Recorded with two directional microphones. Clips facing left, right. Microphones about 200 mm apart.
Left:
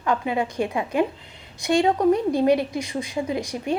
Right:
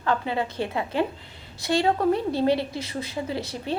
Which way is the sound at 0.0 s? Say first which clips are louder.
Left 2 dB; 15° left (ahead or behind).